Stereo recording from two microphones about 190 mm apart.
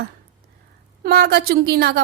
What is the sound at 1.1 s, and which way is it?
Speech, 55° right (ahead or behind).